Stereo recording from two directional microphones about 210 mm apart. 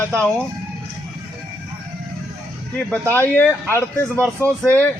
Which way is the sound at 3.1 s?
10° left (ahead or behind).